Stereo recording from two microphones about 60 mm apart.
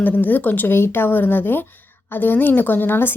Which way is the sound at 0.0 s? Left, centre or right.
Left.